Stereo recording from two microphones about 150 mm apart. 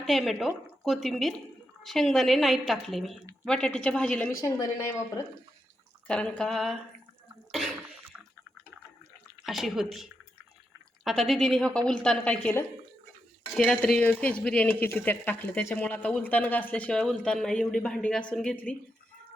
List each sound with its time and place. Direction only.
0.0 s speech: centre (ahead or behind)
4.4 s speech: 20° left (ahead or behind)
6.1 s speech: 5° left (ahead or behind)
9.4 s speech: centre (ahead or behind)